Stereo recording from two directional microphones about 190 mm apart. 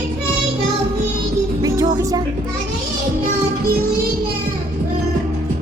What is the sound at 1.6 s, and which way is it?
Music, 20° right (ahead or behind).